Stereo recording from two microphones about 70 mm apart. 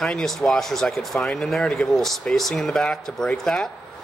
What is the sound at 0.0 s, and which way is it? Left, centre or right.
Speech, centre.